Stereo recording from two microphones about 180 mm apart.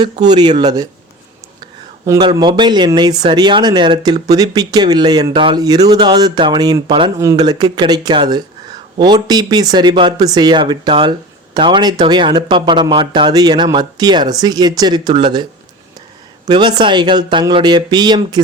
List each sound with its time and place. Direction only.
0.0 s speech: 25° right (ahead or behind)
2.0 s speech: 25° right (ahead or behind)
16.5 s speech: 25° right (ahead or behind)